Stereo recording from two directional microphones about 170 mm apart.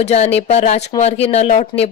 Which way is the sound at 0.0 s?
40° left (ahead or behind).